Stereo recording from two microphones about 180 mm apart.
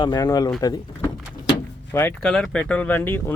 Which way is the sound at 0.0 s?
20° left (ahead or behind).